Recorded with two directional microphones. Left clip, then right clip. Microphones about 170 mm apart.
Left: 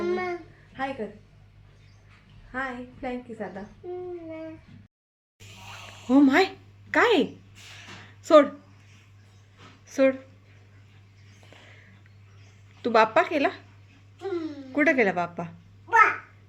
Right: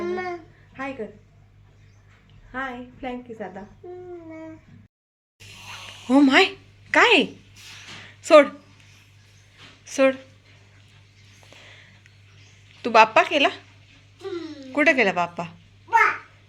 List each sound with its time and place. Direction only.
0.0 s a sound: 15° right (ahead or behind)
0.7 s speech: 5° right (ahead or behind)
2.5 s a woman's voice: 5° left (ahead or behind)
6.1 s a woman's voice: centre (ahead or behind)
9.8 s a sound: 5° left (ahead or behind)
12.8 s a woman's voice: 5° left (ahead or behind)
14.7 s speech: 10° left (ahead or behind)